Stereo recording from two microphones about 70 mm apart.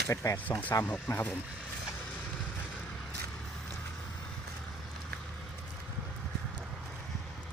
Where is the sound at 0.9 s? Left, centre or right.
Left.